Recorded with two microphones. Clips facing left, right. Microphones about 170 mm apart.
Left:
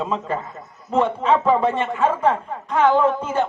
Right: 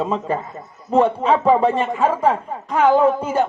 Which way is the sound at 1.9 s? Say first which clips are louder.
Right 1 dB; 10° right (ahead or behind).